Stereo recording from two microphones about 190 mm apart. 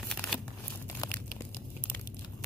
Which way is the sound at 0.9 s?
20° left (ahead or behind).